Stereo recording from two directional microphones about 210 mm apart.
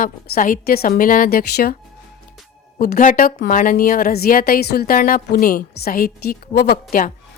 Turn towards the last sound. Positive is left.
turn(degrees=45)  # may be behind; listen again after turning